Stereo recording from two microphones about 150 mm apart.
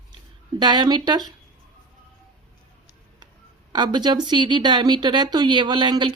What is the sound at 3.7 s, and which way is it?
Speech, 30° right (ahead or behind).